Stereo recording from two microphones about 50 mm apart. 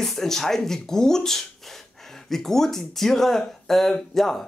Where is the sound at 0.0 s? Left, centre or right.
Centre.